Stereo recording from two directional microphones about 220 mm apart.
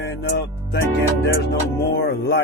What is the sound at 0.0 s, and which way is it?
Speech, 50° left (ahead or behind).